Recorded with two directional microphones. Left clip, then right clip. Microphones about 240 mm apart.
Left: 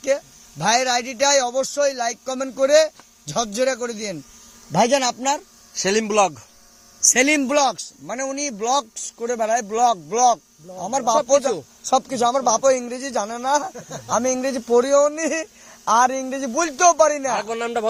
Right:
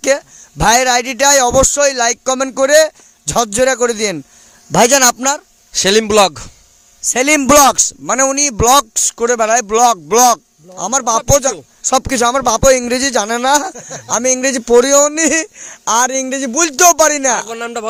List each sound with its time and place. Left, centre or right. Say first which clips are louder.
0.0 s a man's voice: right 7 dB; right
7.1 s speech: right 5 dB; right
7.3 s a man's voice: right 11 dB; right
17.5 s speech: right 2 dB; right